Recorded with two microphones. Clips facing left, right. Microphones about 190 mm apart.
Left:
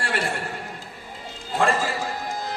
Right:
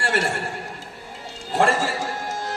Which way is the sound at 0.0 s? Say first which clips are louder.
Right 3 dB; 75° right (ahead or behind).